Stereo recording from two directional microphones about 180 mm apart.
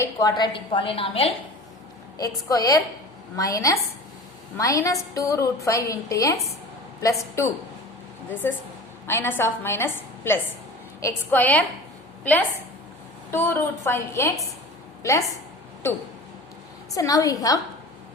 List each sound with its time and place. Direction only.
0.0 s a woman's voice: 20° left (ahead or behind)
2.1 s a woman's voice: 20° left (ahead or behind)
16.9 s a woman's voice: 20° left (ahead or behind)